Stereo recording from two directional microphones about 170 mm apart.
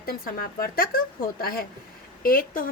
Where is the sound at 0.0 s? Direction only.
60° left (ahead or behind).